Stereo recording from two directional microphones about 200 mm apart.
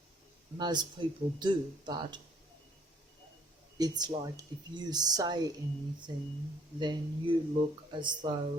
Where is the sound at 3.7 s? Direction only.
20° right (ahead or behind).